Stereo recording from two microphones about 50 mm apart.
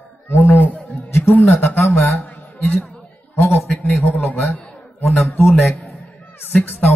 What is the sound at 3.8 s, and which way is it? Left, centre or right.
A man's voice, left.